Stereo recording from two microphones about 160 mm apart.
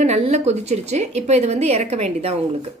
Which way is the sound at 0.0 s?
40° right (ahead or behind).